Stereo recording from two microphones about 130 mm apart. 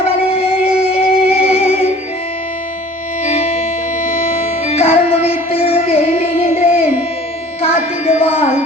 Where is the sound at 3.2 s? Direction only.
55° left (ahead or behind).